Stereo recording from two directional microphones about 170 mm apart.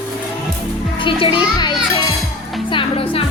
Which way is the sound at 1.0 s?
30° left (ahead or behind).